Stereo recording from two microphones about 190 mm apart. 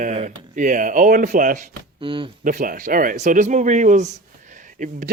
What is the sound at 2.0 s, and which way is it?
Speech, 25° right (ahead or behind).